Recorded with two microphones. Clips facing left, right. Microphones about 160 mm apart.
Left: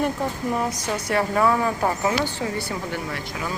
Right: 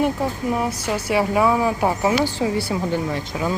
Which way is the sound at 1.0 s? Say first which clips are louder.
Right 2 dB; 10° right (ahead or behind).